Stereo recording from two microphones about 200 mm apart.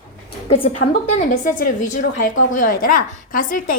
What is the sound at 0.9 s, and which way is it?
A woman's voice, 40° left (ahead or behind).